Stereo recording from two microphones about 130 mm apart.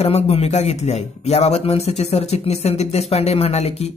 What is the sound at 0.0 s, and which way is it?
Speech, 50° left (ahead or behind).